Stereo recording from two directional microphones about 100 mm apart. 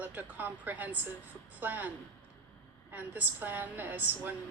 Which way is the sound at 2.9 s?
15° right (ahead or behind).